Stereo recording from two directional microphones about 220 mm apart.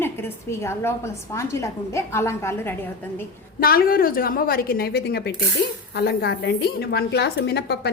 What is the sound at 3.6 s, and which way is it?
A woman's voice, 40° left (ahead or behind).